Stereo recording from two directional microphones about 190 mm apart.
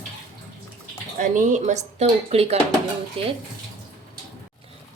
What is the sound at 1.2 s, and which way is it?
A woman's voice, 45° right (ahead or behind).